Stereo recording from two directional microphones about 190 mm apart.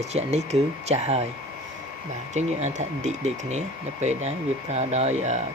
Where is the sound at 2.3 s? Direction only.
40° right (ahead or behind).